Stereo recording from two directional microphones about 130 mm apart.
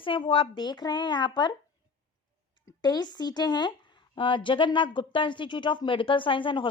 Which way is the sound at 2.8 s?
35° left (ahead or behind).